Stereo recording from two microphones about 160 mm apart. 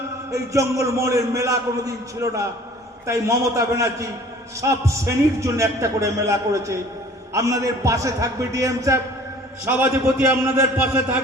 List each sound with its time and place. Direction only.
0.3 s a man's voice: 20° right (ahead or behind)